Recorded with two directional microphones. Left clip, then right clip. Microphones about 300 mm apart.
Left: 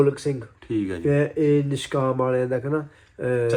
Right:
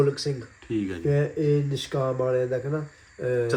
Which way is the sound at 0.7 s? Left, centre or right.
Centre.